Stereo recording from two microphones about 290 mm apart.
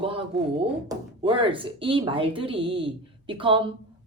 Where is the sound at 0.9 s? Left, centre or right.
Centre.